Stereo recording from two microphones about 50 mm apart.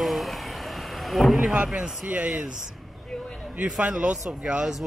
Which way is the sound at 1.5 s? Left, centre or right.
Centre.